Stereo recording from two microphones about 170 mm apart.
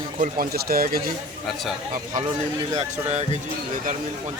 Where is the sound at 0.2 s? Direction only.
60° right (ahead or behind).